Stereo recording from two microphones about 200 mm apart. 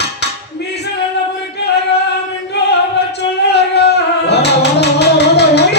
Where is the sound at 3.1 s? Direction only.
55° left (ahead or behind).